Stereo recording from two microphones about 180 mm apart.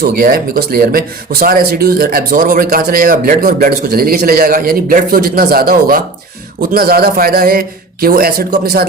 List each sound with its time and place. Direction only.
0.0 s speech: 55° right (ahead or behind)